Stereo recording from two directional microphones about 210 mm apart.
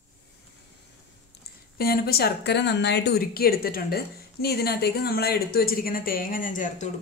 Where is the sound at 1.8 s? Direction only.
45° left (ahead or behind).